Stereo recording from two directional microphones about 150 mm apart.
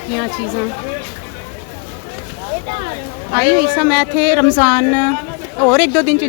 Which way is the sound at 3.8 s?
Centre (ahead or behind).